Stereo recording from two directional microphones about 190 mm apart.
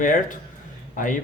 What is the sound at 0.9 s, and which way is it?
Speech, 45° left (ahead or behind).